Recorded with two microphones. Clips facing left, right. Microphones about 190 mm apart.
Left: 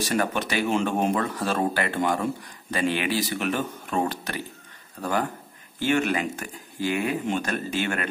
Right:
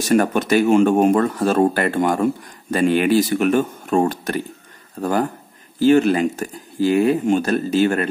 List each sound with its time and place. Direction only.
0.0 s speech: 45° right (ahead or behind)
5.8 s speech: 35° right (ahead or behind)